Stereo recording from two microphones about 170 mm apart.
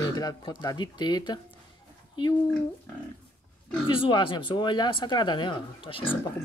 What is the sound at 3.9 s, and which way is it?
Speech, 30° left (ahead or behind).